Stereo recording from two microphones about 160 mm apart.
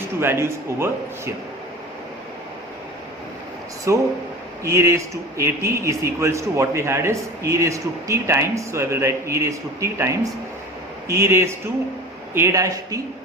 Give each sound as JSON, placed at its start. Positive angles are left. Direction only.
{"t": 0.2, "sound": "a man's voice", "side_deg": -15}
{"t": 3.9, "sound": "a man's voice", "side_deg": -20}